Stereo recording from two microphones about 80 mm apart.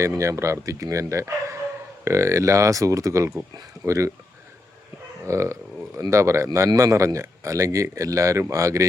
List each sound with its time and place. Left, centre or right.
0.2 s speech: right
5.2 s speech: right